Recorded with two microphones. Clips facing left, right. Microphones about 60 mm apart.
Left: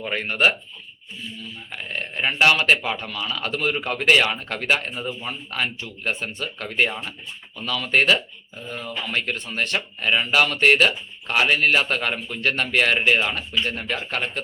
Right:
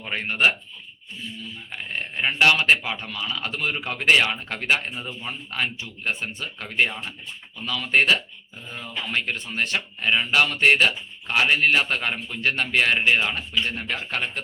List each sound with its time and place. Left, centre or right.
0.1 s a man's voice: left
1.7 s a man's voice: left